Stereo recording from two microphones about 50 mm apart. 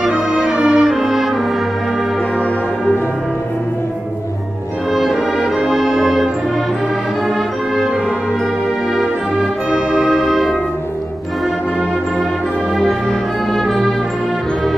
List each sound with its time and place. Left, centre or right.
0.1 s music: centre
0.6 s music: right
0.8 s brass instrument: centre
5.4 s music: centre
9.7 s brass instrument: centre
13.7 s music: centre